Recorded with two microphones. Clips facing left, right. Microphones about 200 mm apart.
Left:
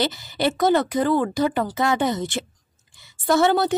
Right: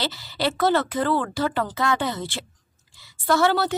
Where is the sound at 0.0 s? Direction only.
20° left (ahead or behind).